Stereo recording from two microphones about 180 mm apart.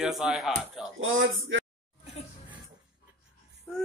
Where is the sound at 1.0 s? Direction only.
90° right.